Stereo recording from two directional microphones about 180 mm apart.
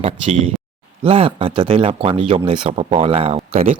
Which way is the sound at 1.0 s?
30° right (ahead or behind).